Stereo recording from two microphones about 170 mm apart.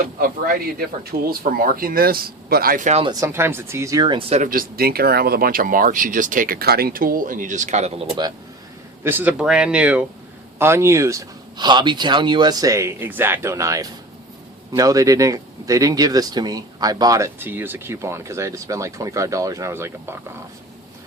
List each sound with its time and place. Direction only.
0.0 s speech: 60° right (ahead or behind)
3.0 s a man's voice: 20° right (ahead or behind)
4.4 s speech: 60° right (ahead or behind); by 8.0 s 40° right (ahead or behind)
9.0 s a man's voice: 10° right (ahead or behind)